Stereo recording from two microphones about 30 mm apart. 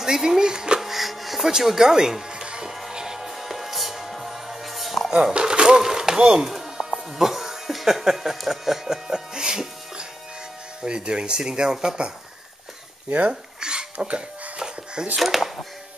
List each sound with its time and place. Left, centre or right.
0.0 s speech: centre
0.7 s wheeze: centre
1.6 s speech: centre
2.4 s music: right
3.3 s music: centre
5.3 s a sound: right
5.8 s a sound: centre
6.4 s music: centre
7.2 s speech: centre
13.3 s dishes: right
13.9 s speech: right
15.1 s speech: centre